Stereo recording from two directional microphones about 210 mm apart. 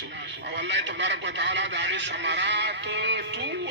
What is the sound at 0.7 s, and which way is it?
Speech, 55° right (ahead or behind).